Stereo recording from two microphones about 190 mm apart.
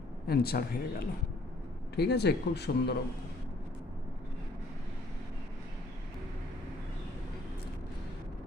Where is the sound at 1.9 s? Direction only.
60° left (ahead or behind).